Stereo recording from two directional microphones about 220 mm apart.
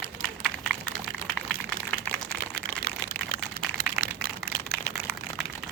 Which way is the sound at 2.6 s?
40° left (ahead or behind).